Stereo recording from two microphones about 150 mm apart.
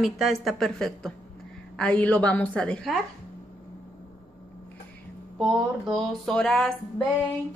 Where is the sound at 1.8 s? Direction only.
10° left (ahead or behind).